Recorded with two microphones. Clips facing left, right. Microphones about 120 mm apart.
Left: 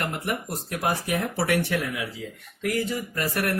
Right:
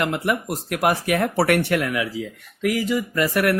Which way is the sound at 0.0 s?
90° right.